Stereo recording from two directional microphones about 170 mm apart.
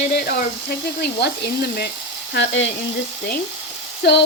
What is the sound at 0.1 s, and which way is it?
Speech, 70° left (ahead or behind).